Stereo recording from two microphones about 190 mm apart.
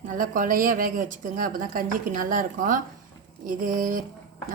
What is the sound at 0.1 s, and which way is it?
A woman's voice, 45° right (ahead or behind).